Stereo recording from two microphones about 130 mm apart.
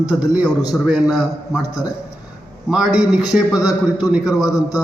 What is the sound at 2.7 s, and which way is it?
A man's voice, 5° right (ahead or behind).